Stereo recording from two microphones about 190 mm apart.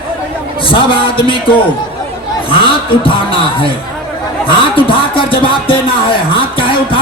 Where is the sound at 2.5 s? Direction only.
30° left (ahead or behind).